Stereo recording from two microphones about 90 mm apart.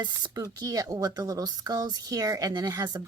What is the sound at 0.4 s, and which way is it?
Speech, 40° right (ahead or behind).